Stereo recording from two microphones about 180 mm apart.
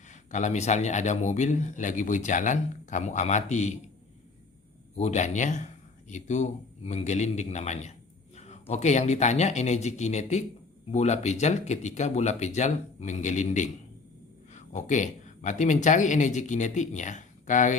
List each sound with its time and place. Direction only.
0.1 s speech: 40° left (ahead or behind)
4.9 s speech: 40° left (ahead or behind)